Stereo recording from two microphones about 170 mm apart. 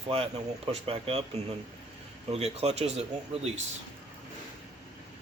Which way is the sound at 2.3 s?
40° right (ahead or behind).